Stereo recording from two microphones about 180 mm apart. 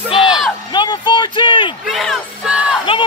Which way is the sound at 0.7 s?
25° left (ahead or behind).